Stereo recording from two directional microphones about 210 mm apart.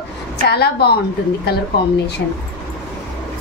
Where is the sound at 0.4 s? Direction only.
50° left (ahead or behind).